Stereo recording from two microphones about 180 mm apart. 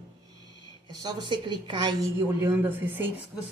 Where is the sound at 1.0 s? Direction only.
25° right (ahead or behind).